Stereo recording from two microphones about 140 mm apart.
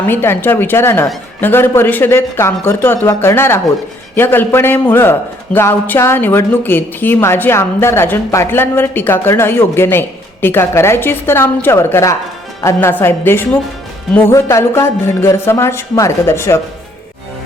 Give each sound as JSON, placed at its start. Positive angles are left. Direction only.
{"t": 0.0, "sound": "a woman's voice", "side_deg": 15}